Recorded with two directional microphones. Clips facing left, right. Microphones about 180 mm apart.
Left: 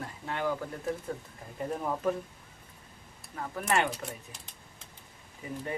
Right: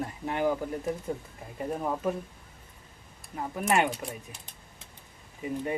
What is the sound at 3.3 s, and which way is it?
Speech, 15° right (ahead or behind).